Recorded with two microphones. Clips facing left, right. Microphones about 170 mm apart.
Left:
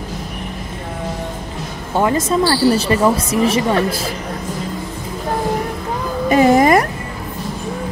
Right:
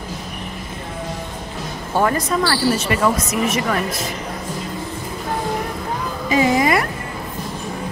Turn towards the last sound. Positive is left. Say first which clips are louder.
# left 5 dB
turn(degrees=45)  # may be behind; listen again after turning